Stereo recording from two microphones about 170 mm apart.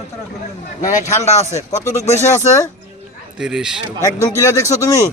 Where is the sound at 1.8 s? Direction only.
20° left (ahead or behind).